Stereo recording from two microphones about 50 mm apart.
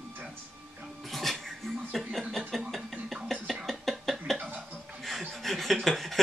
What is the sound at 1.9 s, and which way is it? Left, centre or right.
Speech, centre.